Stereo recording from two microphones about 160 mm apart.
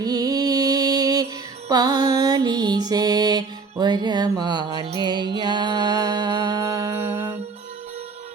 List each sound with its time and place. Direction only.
0.0 s music: 25° right (ahead or behind)